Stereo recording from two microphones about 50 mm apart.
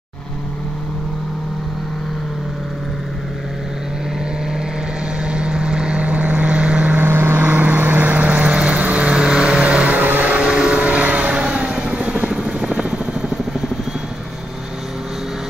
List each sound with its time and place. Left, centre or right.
5.2 s vehicle: centre
7.0 s vehicle: right
7.4 s vehicle: right
12.3 s helicopter: centre